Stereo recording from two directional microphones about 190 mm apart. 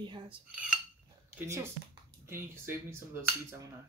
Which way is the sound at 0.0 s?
25° right (ahead or behind).